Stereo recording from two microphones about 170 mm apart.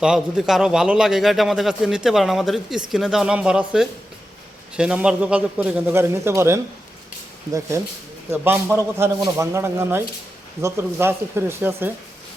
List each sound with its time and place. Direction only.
0.0 s a man's voice: 5° right (ahead or behind)
8.3 s a man's voice: 15° right (ahead or behind)